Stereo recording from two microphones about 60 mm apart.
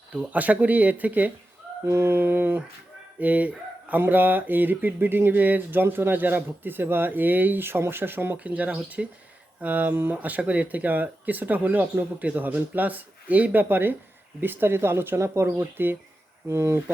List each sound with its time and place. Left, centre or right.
0.3 s speech: right
1.8 s speech: right
3.2 s speech: right
8.4 s speech: right